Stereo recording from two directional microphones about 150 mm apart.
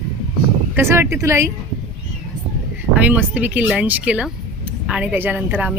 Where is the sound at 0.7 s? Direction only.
15° right (ahead or behind).